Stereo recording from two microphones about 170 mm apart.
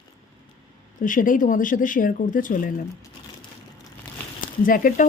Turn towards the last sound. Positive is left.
turn(degrees=55)  # may be behind; listen again after turning